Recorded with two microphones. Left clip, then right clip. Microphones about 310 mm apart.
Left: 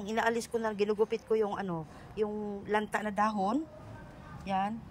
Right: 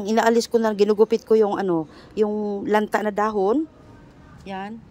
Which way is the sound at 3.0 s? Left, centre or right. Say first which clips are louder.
Right 9 dB; centre.